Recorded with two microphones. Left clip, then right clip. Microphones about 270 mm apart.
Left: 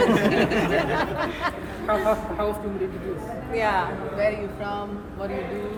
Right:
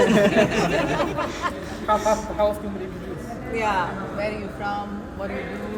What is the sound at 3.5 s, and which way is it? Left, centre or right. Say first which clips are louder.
Speech: even; centre.